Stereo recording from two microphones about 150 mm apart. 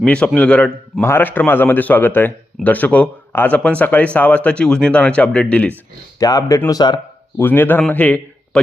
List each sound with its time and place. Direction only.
0.0 s a man's voice: 5° left (ahead or behind)
6.1 s speech: 25° left (ahead or behind)
7.3 s a man's voice: 15° left (ahead or behind)